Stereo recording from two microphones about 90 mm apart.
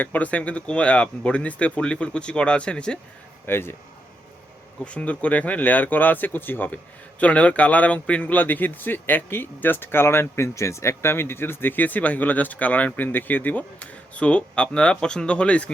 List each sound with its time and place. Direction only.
0.0 s speech: 15° left (ahead or behind)
3.4 s speech: 25° left (ahead or behind)
4.9 s speech: 15° left (ahead or behind)